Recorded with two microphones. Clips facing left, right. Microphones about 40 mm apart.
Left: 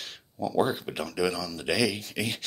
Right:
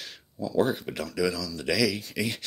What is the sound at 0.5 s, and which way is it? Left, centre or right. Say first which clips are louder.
Speech: right 1 dB; left.